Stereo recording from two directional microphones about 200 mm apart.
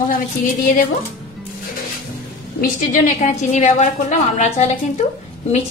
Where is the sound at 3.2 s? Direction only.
35° left (ahead or behind).